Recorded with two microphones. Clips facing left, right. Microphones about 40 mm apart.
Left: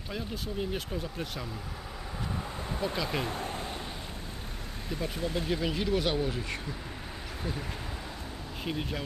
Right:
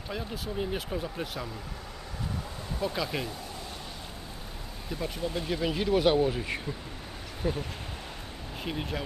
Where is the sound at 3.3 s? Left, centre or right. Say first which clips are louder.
Left 5 dB; left.